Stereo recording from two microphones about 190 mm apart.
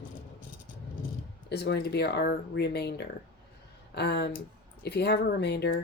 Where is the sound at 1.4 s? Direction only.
60° left (ahead or behind).